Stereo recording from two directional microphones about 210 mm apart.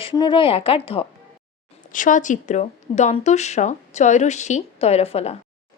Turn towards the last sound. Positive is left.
turn(degrees=30)  # may be behind; listen again after turning